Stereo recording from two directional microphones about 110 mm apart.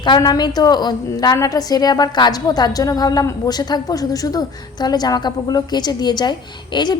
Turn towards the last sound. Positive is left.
turn(degrees=40)  # may be behind; listen again after turning